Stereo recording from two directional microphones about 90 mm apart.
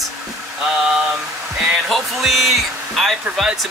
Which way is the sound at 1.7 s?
Centre (ahead or behind).